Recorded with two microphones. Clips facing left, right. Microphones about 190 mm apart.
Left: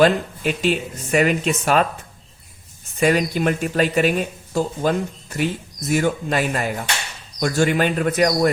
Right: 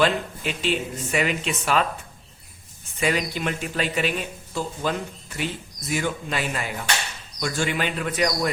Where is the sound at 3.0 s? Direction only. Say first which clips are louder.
Left 7 dB; 45° left (ahead or behind).